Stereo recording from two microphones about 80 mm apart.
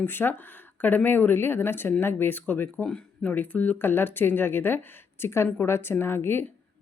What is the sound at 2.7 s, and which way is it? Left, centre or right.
Speech, centre.